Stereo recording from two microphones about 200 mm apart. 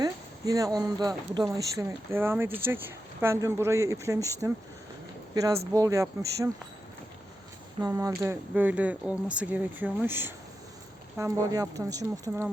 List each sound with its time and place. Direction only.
0.0 s speech: 15° right (ahead or behind)
5.3 s speech: 15° right (ahead or behind)
7.8 s speech: 15° right (ahead or behind)